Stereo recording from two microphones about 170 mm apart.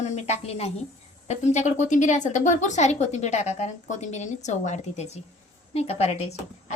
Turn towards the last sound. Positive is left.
turn(degrees=40)  # may be behind; listen again after turning